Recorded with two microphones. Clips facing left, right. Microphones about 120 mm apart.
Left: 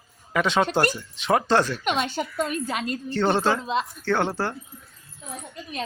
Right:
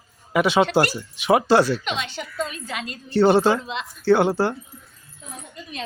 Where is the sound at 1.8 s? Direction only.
45° left (ahead or behind).